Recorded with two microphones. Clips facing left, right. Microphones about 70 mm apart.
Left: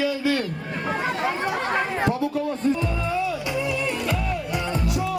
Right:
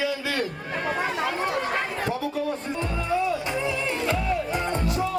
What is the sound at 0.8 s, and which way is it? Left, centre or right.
Chatter, centre.